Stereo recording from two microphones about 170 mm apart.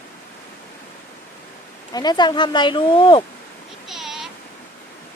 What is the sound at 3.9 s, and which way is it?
Bleat, centre (ahead or behind).